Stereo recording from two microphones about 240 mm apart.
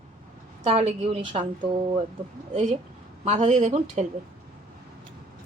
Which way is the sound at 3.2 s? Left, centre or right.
Right.